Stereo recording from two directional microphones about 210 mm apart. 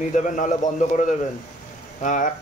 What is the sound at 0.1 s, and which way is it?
Speech, 35° left (ahead or behind).